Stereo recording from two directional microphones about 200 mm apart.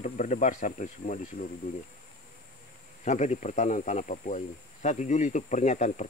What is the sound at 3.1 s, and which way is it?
Speech, 35° left (ahead or behind).